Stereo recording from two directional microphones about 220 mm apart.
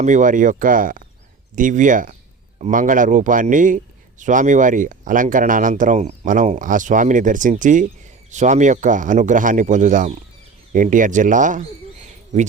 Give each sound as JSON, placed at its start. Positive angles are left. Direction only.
{"t": 0.0, "sound": "speech", "side_deg": -35}
{"t": 12.0, "sound": "bird", "side_deg": -35}